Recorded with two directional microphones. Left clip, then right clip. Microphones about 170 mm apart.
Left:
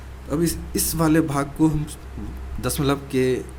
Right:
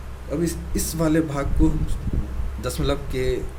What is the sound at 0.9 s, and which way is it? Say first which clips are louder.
A man's voice: left 2 dB; 30° left (ahead or behind).